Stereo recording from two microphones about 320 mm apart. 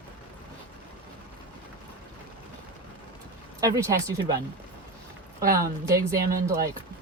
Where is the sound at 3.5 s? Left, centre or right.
Centre.